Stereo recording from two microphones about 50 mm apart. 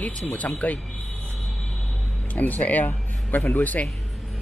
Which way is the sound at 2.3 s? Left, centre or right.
Left.